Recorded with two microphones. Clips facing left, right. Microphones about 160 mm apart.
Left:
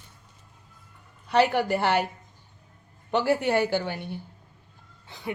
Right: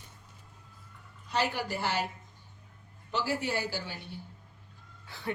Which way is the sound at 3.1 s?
60° left (ahead or behind).